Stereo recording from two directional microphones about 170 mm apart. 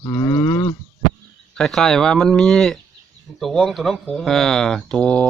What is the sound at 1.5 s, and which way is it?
Speech, centre (ahead or behind).